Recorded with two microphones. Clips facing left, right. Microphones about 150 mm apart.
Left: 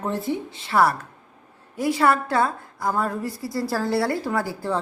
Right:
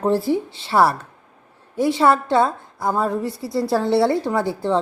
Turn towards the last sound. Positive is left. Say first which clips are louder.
# right 5 dB
turn(degrees=-25)  # may be behind; listen again after turning